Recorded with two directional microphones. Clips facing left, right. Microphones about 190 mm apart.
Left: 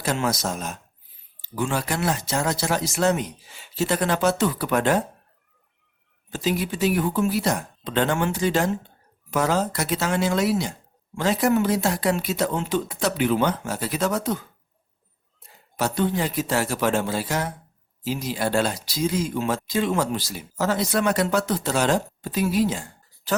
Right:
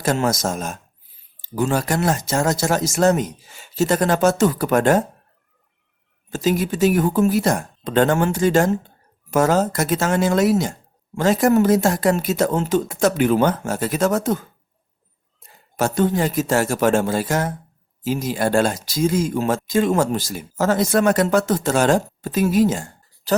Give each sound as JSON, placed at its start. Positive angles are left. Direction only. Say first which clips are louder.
{"t": 0.0, "sound": "speech", "louder": "right 5 dB", "side_deg": -45}
{"t": 6.3, "sound": "speech", "louder": "right 5 dB", "side_deg": -45}
{"t": 15.8, "sound": "speech", "louder": "right 5 dB", "side_deg": -45}